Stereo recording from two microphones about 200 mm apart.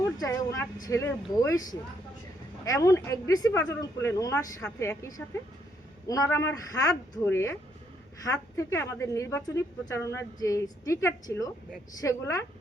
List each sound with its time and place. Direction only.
0.2 s a woman's voice: 15° left (ahead or behind)
2.6 s a woman's voice: 15° left (ahead or behind)